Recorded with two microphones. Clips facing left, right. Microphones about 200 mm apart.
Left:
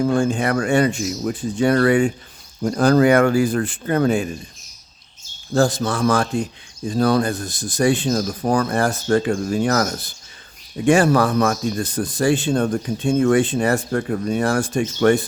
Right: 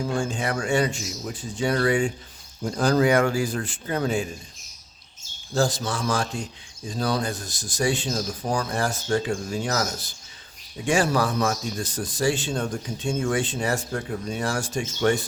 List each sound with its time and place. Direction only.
0.0 s speech: 55° left (ahead or behind)
5.5 s speech: 55° left (ahead or behind)